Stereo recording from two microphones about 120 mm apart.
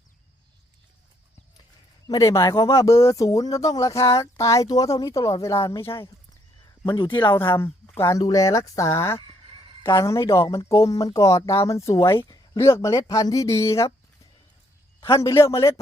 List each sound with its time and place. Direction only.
2.0 s speech: 30° left (ahead or behind)
6.8 s speech: 40° left (ahead or behind)
7.6 s speech: 20° left (ahead or behind)
15.0 s speech: 30° left (ahead or behind)